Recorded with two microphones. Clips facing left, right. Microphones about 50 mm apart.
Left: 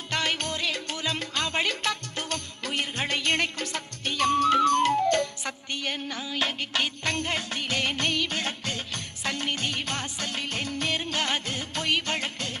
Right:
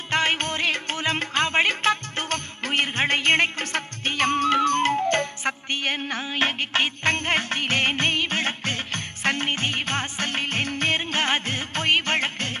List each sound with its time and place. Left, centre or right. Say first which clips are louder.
0.1 s music: right 5 dB; right